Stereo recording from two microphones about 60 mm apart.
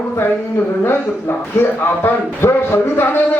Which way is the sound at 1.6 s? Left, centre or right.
Left.